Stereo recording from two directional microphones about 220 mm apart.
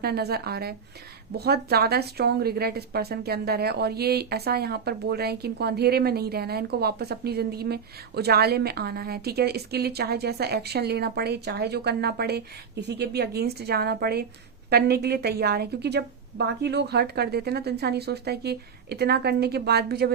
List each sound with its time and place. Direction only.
0.0 s a woman's voice: 45° right (ahead or behind)